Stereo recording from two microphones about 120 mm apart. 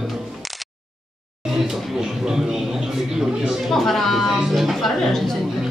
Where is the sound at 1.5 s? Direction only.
5° right (ahead or behind).